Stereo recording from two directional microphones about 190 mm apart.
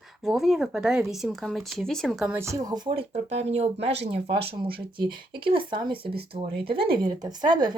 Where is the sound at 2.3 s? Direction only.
15° right (ahead or behind).